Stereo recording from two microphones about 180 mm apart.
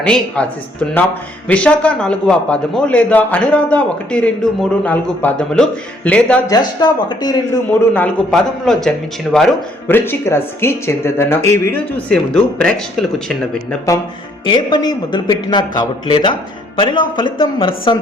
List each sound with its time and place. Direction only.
0.0 s speech: 5° left (ahead or behind)
6.5 s speech: 25° left (ahead or behind)
7.9 s speech: 5° left (ahead or behind)
9.8 s speech: 10° left (ahead or behind)
14.4 s speech: 25° left (ahead or behind)